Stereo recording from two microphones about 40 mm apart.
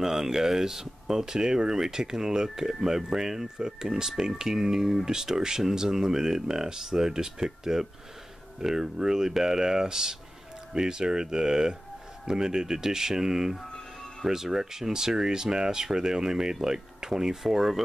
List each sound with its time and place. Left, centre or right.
0.0 s speech: centre